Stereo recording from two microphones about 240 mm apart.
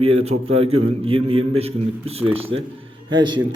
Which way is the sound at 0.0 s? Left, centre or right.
Right.